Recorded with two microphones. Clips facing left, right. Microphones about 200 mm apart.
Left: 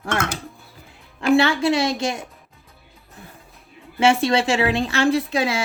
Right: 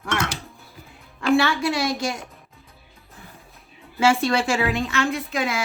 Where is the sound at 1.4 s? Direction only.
25° left (ahead or behind).